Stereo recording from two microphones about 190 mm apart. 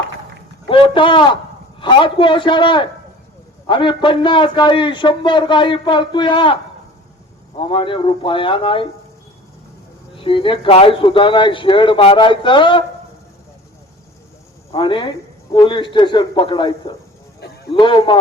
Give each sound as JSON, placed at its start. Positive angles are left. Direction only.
{"t": 0.7, "sound": "a man's voice", "side_deg": 25}
{"t": 10.2, "sound": "a man's voice", "side_deg": 25}
{"t": 14.7, "sound": "a man's voice", "side_deg": 25}